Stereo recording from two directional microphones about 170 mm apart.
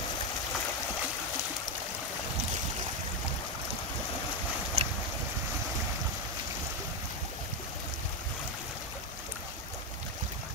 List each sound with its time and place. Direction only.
4.8 s boat: 35° right (ahead or behind)